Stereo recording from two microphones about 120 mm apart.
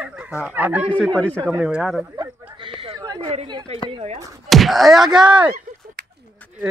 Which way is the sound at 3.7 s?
60° right (ahead or behind).